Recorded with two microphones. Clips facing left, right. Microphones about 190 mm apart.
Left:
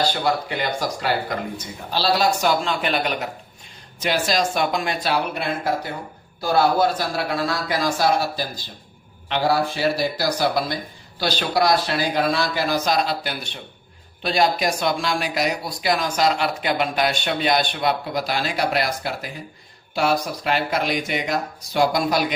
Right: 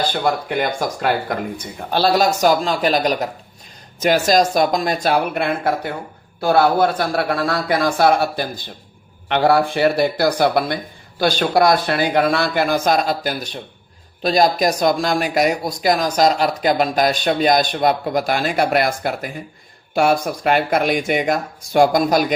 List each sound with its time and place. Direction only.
0.1 s speech: 55° right (ahead or behind)